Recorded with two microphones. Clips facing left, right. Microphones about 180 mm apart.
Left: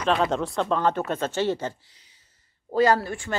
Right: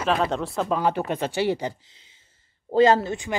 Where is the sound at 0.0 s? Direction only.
Centre (ahead or behind).